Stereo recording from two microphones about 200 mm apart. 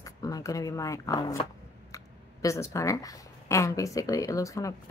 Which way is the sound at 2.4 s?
15° left (ahead or behind).